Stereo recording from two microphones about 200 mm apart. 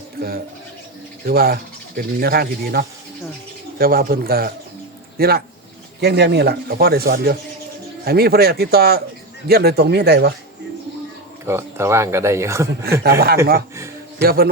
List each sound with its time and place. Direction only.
0.2 s speech: 50° right (ahead or behind)
11.4 s speech: 15° right (ahead or behind)
13.0 s speech: 50° right (ahead or behind)